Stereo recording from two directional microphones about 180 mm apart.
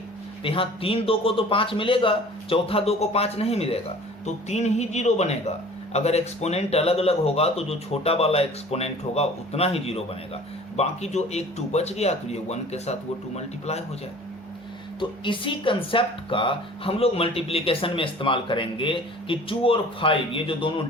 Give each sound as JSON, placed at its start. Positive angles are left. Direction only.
{"t": 0.4, "sound": "speech", "side_deg": 30}
{"t": 15.2, "sound": "speech", "side_deg": 30}